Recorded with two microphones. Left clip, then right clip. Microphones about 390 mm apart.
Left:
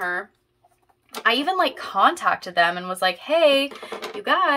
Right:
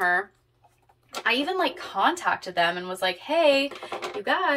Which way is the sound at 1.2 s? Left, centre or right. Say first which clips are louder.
Left 4 dB; centre.